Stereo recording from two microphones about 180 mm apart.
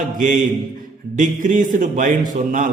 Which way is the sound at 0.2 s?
45° right (ahead or behind).